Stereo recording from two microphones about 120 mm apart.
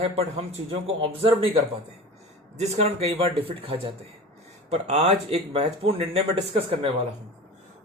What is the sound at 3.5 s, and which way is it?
Speech, 50° right (ahead or behind).